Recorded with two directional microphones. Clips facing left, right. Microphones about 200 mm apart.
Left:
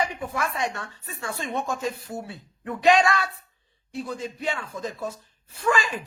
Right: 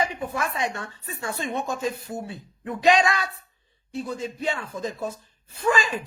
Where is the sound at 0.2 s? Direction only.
25° right (ahead or behind).